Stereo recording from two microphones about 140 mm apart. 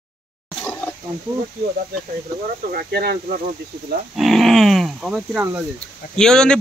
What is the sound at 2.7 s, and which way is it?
Speech, 90° right.